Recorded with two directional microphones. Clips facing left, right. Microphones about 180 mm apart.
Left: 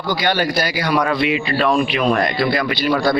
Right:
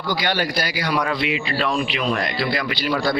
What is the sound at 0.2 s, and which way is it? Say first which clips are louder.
Speech: left 4 dB; 50° left (ahead or behind).